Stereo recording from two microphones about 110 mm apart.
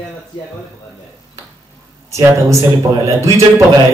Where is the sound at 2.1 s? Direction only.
30° right (ahead or behind).